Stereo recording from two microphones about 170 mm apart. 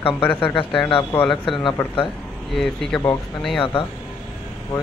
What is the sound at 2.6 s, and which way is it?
Speech, 5° left (ahead or behind).